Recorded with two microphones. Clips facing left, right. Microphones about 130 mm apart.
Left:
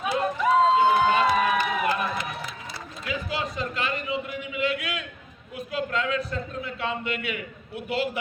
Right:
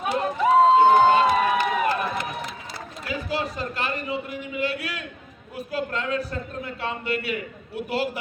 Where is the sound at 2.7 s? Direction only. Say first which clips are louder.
Right 1 dB; 40° right (ahead or behind).